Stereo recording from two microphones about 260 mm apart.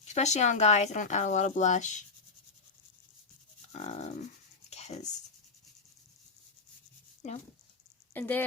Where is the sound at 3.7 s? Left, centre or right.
Left.